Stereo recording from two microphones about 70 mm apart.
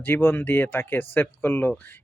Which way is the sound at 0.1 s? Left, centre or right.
Left.